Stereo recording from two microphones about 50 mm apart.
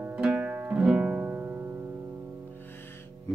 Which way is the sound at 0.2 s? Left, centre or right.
Right.